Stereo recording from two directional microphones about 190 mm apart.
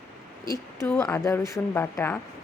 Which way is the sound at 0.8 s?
15° left (ahead or behind).